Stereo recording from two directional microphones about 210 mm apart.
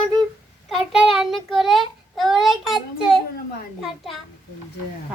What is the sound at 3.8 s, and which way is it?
Child singing, centre (ahead or behind).